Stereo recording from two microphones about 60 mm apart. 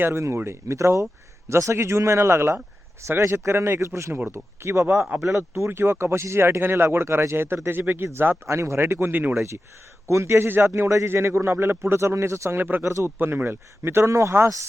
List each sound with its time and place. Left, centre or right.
0.0 s speech: right
8.4 s speech: right
9.3 s speech: right
10.8 s speech: right
12.5 s speech: right
12.8 s speech: right
13.1 s speech: right
14.1 s speech: right